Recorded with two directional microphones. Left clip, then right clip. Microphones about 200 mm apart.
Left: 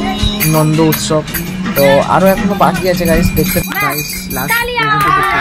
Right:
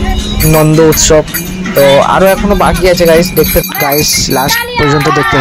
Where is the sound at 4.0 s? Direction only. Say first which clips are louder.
Right 11 dB; 45° right (ahead or behind).